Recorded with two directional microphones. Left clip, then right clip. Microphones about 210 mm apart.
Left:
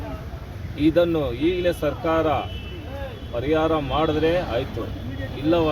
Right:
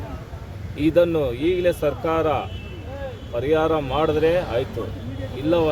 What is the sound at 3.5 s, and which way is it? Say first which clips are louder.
Speech: right 1 dB; 20° right (ahead or behind).